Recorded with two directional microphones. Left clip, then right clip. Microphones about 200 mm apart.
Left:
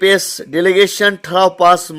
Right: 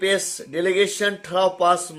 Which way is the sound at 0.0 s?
45° left (ahead or behind).